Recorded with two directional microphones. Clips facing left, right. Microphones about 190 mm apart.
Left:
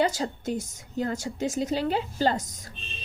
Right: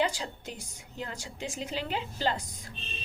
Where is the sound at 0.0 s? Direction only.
45° left (ahead or behind).